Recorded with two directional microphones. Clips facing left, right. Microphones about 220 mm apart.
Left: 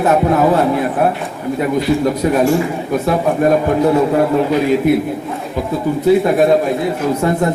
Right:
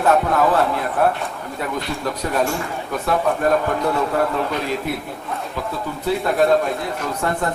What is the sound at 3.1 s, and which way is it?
A man's voice, 20° left (ahead or behind).